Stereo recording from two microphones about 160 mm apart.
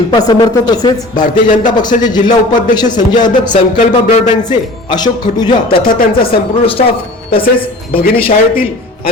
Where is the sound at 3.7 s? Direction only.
50° left (ahead or behind).